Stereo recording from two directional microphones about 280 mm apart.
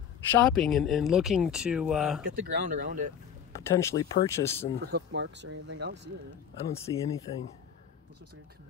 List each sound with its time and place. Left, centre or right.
0.3 s speech: centre
2.2 s speech: right
3.5 s speech: centre
4.9 s speech: right
6.9 s speech: centre